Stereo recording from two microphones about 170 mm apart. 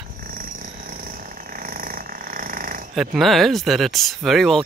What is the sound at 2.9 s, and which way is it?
Speech, centre (ahead or behind).